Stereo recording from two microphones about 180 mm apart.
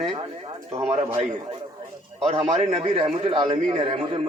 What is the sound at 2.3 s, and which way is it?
A man's voice, 35° right (ahead or behind).